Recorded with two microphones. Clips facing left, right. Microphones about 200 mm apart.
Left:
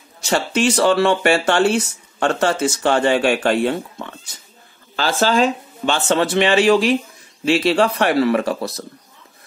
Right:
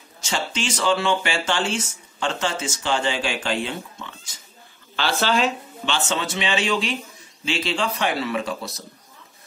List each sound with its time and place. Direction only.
0.2 s speech: 60° left (ahead or behind)
4.9 s speech: 40° left (ahead or behind)
5.9 s speech: 60° left (ahead or behind)